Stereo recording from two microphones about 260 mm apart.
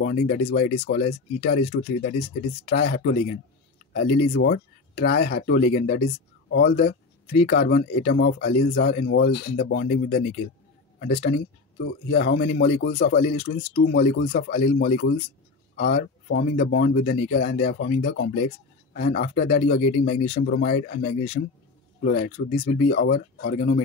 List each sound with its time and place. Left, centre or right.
0.0 s speech: left
1.4 s speech: left
13.4 s speech: left
13.7 s speech: left